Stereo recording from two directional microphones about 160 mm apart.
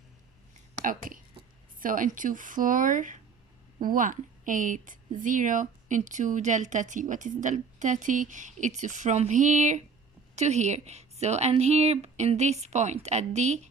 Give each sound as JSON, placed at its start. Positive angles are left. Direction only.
{"t": 0.9, "sound": "a woman's voice", "side_deg": -55}